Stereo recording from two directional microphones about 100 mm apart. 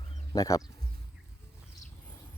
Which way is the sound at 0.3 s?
35° left (ahead or behind).